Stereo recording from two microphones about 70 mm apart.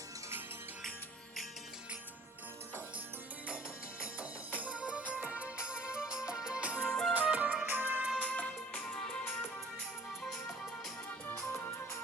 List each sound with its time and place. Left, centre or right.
4.6 s music: centre
6.8 s music: centre
7.1 s music: right
8.2 s music: left